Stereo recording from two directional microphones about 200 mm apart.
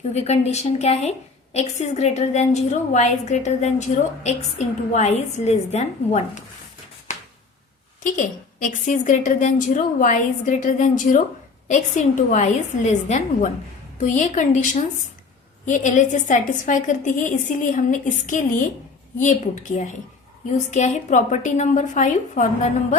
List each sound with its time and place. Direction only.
0.1 s a woman's voice: 35° left (ahead or behind)
7.1 s a sound: 40° left (ahead or behind)
8.0 s a woman's voice: 40° left (ahead or behind)